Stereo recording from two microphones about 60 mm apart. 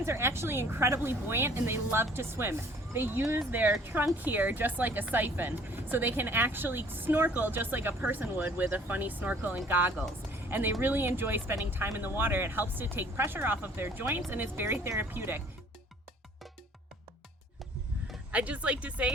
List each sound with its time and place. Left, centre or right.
0.0 s speech: right
18.3 s speech: right